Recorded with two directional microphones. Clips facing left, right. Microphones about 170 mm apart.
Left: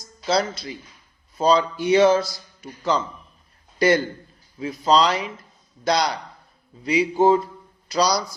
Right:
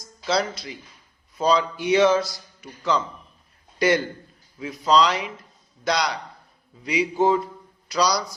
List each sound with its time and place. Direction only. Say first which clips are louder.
0.3 s a man's voice: left 2 dB; 30° left (ahead or behind)